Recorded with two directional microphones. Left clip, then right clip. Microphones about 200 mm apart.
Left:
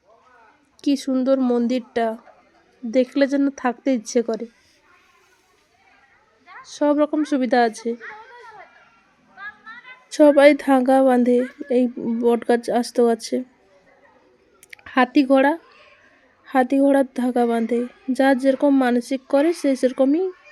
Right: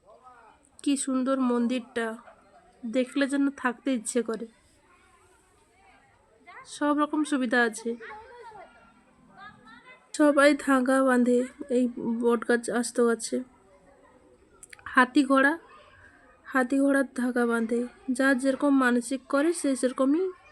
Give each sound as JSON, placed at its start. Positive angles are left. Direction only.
{"t": 0.8, "sound": "a woman's voice", "side_deg": 20}
{"t": 6.6, "sound": "a woman's voice", "side_deg": 15}
{"t": 10.1, "sound": "a woman's voice", "side_deg": 20}
{"t": 14.7, "sound": "a woman's voice", "side_deg": 15}